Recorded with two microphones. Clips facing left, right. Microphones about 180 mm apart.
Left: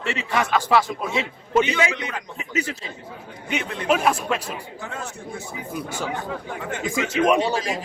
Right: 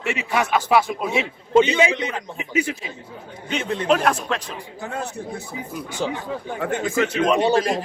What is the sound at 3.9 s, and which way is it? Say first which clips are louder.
Speech: even; 5° left (ahead or behind).